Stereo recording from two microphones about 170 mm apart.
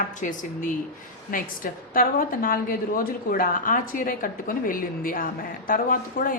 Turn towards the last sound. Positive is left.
turn(degrees=55)  # may be behind; listen again after turning